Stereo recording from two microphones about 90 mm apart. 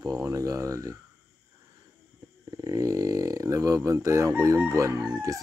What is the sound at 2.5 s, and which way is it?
Speech, 40° right (ahead or behind).